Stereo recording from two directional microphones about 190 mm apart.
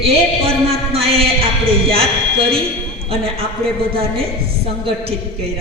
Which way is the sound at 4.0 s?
30° right (ahead or behind).